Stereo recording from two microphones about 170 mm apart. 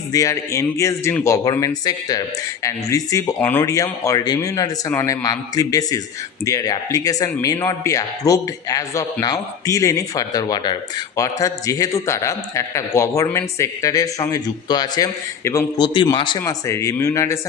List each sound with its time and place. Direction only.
0.1 s a man's voice: 20° left (ahead or behind)
16.4 s a man's voice: 15° left (ahead or behind)